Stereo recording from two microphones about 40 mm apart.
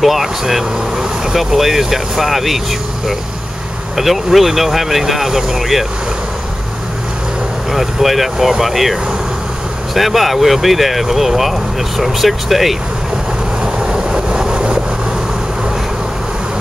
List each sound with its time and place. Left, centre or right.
0.0 s speech: centre
3.9 s speech: centre
7.7 s speech: centre
9.9 s speech: centre
13.8 s vehicle: right